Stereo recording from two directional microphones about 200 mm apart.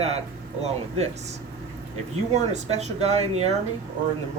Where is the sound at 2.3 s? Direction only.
35° right (ahead or behind).